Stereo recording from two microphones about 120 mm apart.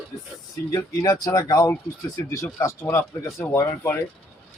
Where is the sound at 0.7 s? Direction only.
30° left (ahead or behind).